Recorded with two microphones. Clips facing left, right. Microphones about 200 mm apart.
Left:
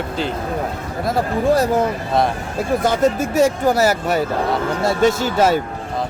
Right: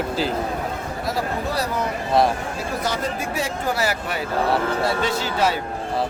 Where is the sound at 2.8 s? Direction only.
50° left (ahead or behind).